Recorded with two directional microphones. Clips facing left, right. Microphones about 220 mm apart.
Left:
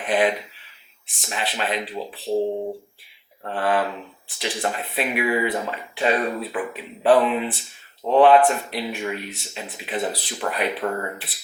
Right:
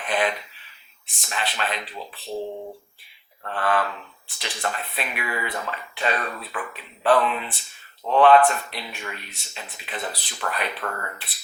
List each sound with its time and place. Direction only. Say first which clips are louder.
0.0 s speech: left 4 dB; 5° left (ahead or behind)
2.3 s speech: left 8 dB; 35° left (ahead or behind)
3.4 s speech: left 2 dB; 10° left (ahead or behind)